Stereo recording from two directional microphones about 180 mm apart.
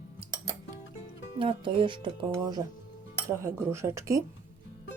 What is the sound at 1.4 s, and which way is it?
Speech, 30° right (ahead or behind).